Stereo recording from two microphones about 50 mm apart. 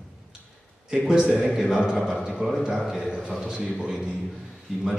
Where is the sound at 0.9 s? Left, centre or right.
Centre.